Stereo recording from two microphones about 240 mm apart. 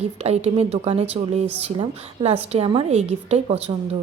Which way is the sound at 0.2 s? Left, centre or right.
Right.